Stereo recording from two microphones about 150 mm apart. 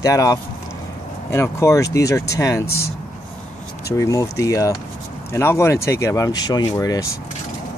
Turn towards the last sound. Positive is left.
turn(degrees=20)  # may be behind; listen again after turning